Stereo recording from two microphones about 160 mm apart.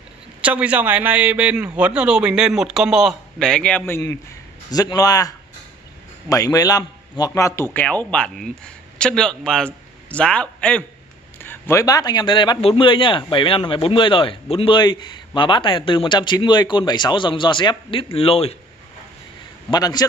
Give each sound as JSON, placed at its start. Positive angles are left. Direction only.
{"t": 0.4, "sound": "a man's voice", "side_deg": -10}
{"t": 19.7, "sound": "a man's voice", "side_deg": 25}